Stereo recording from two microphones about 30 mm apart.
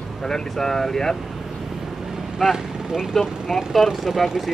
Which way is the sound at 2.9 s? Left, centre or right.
Right.